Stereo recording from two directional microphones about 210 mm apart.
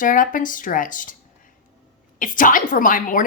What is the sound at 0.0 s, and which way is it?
Speech, 40° left (ahead or behind).